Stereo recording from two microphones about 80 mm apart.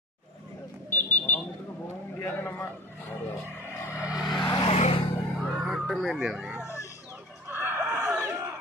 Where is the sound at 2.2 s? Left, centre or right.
Left.